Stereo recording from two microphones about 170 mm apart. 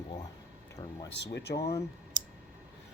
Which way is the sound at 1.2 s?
80° left.